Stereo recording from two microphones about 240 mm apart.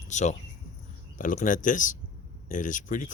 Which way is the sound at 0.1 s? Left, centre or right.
Left.